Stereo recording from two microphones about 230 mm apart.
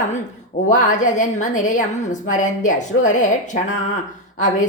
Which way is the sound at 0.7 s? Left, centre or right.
Left.